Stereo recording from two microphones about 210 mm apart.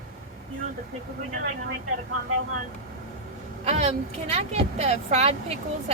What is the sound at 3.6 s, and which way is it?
Speech, 30° right (ahead or behind).